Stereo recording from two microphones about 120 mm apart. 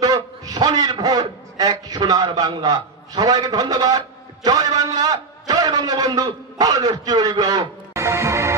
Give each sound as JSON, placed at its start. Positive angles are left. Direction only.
{"t": 0.0, "sound": "a man's voice", "side_deg": -35}